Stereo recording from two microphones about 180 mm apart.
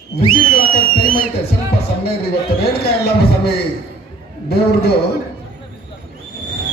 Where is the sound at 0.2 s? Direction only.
30° left (ahead or behind).